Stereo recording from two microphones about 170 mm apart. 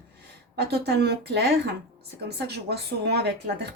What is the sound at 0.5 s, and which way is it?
A woman's voice, 75° right (ahead or behind).